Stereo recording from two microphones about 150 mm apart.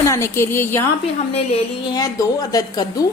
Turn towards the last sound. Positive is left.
turn(degrees=25)  # may be behind; listen again after turning